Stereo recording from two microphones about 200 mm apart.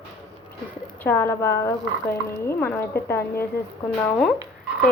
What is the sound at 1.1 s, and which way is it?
Speech, 10° left (ahead or behind).